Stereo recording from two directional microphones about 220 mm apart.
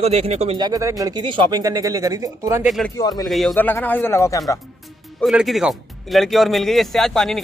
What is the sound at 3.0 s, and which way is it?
Speech, 15° left (ahead or behind).